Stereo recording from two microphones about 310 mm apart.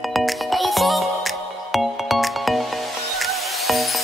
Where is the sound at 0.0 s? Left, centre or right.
Centre.